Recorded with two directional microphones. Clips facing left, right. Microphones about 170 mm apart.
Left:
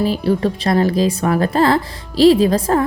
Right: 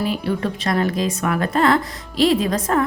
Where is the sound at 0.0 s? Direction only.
35° left (ahead or behind).